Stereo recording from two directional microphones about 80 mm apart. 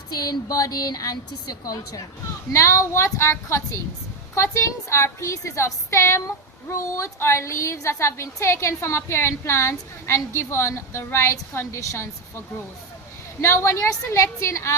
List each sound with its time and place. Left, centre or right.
0.1 s a woman's voice: left
2.5 s a woman's voice: left
13.4 s a woman's voice: left